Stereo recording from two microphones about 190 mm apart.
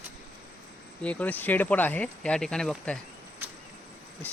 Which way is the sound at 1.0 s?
5° left (ahead or behind).